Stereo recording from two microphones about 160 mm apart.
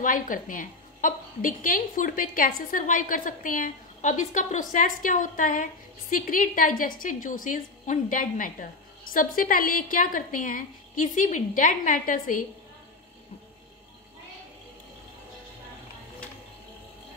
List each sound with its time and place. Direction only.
0.0 s a woman's voice: 55° left (ahead or behind)